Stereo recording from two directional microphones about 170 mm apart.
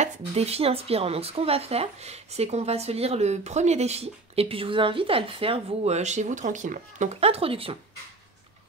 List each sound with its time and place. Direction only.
0.0 s speech: 40° right (ahead or behind)